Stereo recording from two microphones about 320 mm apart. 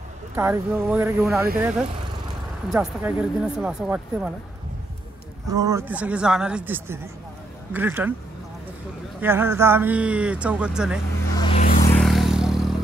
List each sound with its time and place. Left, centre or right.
0.4 s speech: centre
5.5 s speech: centre
9.2 s speech: centre
11.3 s a sound: centre
11.9 s vehicle: centre